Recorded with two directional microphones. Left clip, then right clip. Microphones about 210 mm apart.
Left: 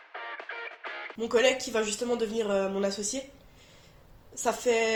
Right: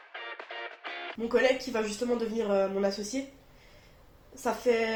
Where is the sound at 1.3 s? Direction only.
40° left (ahead or behind).